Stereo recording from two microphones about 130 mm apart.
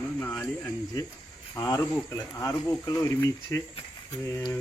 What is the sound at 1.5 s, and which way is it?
Speech, 25° left (ahead or behind).